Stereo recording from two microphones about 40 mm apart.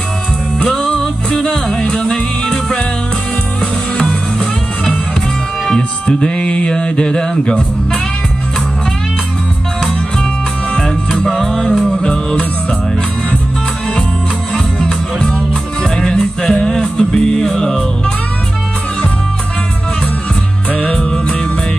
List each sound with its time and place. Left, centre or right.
0.7 s music: centre
5.7 s a sound: centre
10.7 s music: centre
11.8 s music: left
14.5 s music: centre
15.1 s music: left
20.7 s music: left